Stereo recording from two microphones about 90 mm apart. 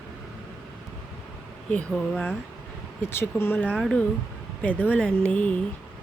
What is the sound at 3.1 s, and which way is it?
Speech, 25° left (ahead or behind).